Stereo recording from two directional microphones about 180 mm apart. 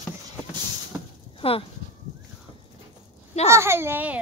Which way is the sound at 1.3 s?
30° left (ahead or behind).